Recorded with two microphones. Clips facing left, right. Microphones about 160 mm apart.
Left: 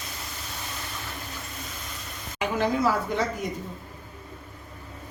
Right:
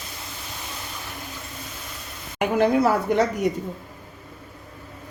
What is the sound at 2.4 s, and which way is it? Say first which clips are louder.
Speech: right 5 dB; 55° right (ahead or behind).